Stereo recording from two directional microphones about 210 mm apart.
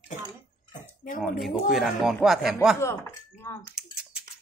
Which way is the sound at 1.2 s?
Centre (ahead or behind).